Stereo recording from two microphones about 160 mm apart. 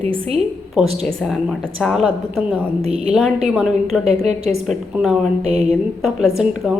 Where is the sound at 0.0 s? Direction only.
35° right (ahead or behind).